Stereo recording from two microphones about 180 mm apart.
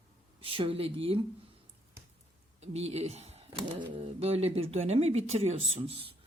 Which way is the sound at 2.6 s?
35° right (ahead or behind).